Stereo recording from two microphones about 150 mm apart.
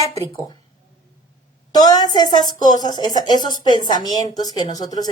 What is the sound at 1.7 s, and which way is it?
A woman's voice, 25° left (ahead or behind).